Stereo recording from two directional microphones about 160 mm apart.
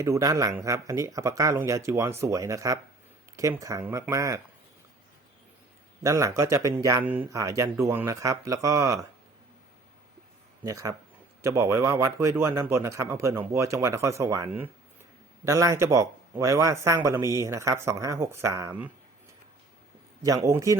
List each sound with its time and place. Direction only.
0.0 s speech: 20° right (ahead or behind)
6.0 s speech: 20° right (ahead or behind)
10.6 s speech: 20° right (ahead or behind)
20.2 s speech: 20° right (ahead or behind)